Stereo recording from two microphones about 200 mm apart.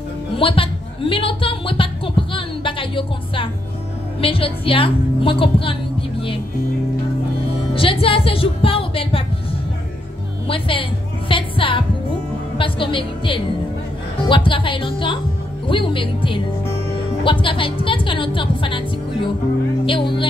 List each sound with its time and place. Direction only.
0.4 s a woman's voice: 25° left (ahead or behind)
7.7 s music: 25° left (ahead or behind)
10.5 s a woman's voice: 25° left (ahead or behind)